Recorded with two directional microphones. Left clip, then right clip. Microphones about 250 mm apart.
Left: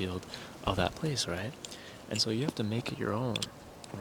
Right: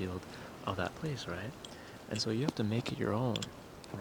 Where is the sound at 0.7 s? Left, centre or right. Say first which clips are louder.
Left 6 dB; left.